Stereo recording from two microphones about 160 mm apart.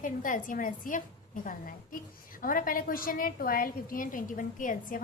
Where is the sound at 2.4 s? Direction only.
60° left (ahead or behind).